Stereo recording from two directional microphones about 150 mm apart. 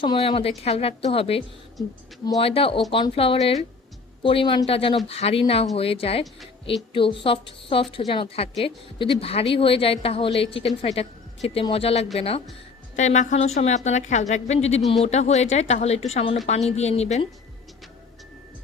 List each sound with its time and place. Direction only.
0.0 s a woman's voice: 35° left (ahead or behind)
13.0 s a woman's voice: 50° left (ahead or behind)
14.8 s speech: centre (ahead or behind)
15.0 s a woman's voice: 50° left (ahead or behind)